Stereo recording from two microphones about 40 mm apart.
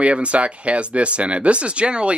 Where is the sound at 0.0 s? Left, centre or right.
Right.